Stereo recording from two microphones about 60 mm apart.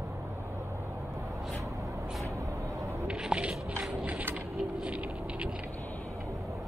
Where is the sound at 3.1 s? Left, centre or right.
Centre.